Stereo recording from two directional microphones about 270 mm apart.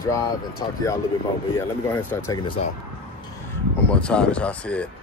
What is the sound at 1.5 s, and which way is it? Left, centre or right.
Speech, centre.